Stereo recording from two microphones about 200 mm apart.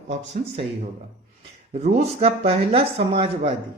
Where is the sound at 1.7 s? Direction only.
30° right (ahead or behind).